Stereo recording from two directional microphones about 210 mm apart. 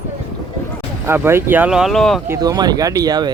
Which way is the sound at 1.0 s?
10° right (ahead or behind).